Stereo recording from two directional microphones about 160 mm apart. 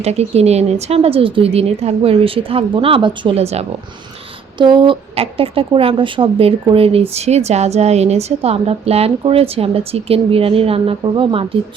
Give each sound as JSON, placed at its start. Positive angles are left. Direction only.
{"t": 0.0, "sound": "a woman's voice", "side_deg": -40}
{"t": 4.5, "sound": "a woman's voice", "side_deg": -30}